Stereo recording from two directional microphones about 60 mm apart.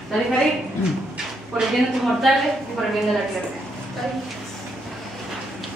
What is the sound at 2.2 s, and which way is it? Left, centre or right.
Speech, centre.